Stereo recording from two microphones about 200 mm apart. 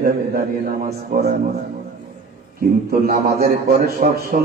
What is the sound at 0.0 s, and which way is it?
A man's voice, 45° right (ahead or behind).